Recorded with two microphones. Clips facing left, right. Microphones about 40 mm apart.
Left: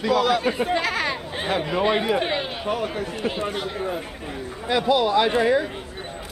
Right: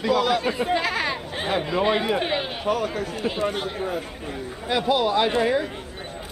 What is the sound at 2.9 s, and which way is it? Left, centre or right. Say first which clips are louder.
Speech: even; left.